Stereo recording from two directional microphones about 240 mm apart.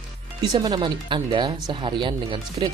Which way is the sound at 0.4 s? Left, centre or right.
Centre.